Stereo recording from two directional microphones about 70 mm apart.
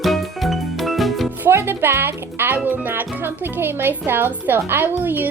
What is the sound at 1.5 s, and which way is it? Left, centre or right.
A woman's voice, right.